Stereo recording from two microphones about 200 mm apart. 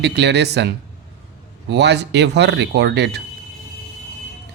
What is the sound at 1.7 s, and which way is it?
Speech, 55° right (ahead or behind).